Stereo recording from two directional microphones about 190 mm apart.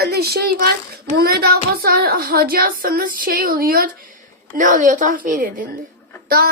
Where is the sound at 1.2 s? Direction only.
55° right (ahead or behind).